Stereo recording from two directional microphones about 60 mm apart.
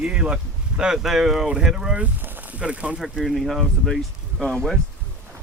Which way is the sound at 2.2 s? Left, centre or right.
Right.